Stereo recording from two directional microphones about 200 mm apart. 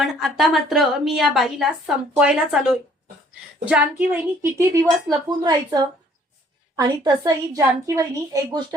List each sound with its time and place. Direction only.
0.0 s a woman's voice: centre (ahead or behind); by 8.6 s 15° right (ahead or behind)